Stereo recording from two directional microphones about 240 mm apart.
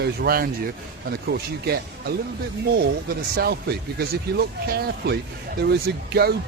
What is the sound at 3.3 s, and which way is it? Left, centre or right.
Speech, right.